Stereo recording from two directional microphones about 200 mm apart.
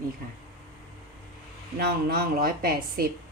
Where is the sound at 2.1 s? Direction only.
50° right (ahead or behind).